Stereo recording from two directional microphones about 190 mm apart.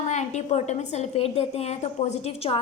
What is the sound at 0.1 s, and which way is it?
A woman's voice, 35° left (ahead or behind).